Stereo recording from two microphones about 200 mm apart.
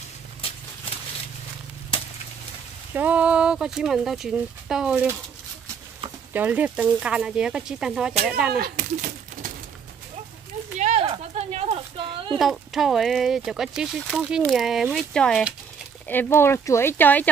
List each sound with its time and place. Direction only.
0.4 s a sound: 30° left (ahead or behind)
2.9 s speech: 10° right (ahead or behind)
6.3 s speech: 10° right (ahead or behind)
8.5 s speech: 50° right (ahead or behind)
10.8 s a sound: 35° right (ahead or behind)
12.4 s speech: centre (ahead or behind)